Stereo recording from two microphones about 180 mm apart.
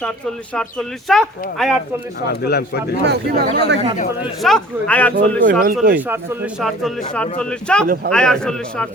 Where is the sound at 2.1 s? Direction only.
65° left (ahead or behind).